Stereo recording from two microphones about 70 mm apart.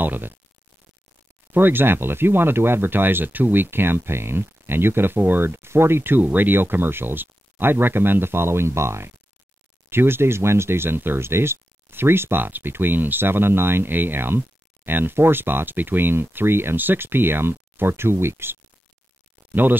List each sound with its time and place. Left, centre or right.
0.0 s speech: right
1.5 s speech: right